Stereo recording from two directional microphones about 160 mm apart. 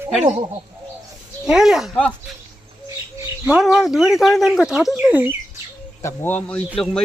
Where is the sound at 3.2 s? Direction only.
5° right (ahead or behind).